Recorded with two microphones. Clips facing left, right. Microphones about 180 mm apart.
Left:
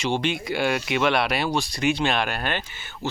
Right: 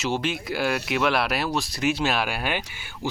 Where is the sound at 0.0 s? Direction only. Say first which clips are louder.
Left 2 dB; 5° right (ahead or behind).